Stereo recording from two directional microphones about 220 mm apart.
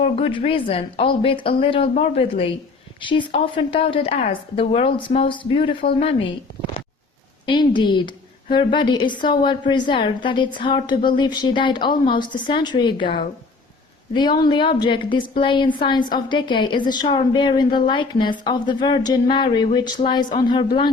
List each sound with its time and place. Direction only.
0.0 s a woman's voice: 25° left (ahead or behind)
7.4 s a woman's voice: 20° left (ahead or behind)